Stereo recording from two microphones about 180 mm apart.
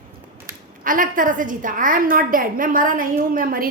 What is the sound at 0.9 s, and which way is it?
Speech, 50° right (ahead or behind).